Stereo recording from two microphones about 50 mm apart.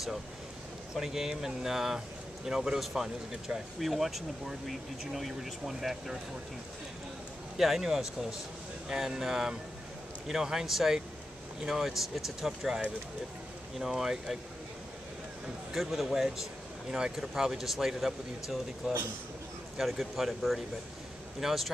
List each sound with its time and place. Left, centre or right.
0.9 s speech: centre
7.5 s speech: centre
15.7 s speech: centre